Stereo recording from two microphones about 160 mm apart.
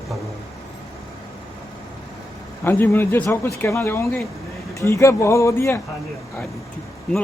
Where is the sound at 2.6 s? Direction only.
15° left (ahead or behind).